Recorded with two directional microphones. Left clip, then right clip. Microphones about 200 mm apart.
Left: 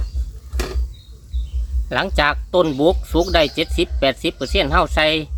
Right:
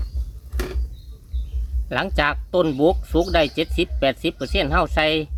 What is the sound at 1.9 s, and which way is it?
Speech, 5° right (ahead or behind).